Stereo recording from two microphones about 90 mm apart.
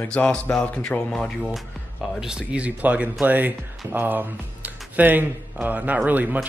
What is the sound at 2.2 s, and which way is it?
Speech, 10° right (ahead or behind).